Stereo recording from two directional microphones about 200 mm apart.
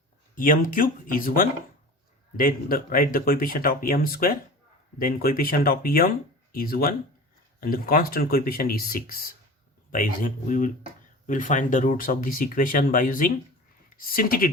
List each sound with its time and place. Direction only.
0.3 s speech: 45° left (ahead or behind)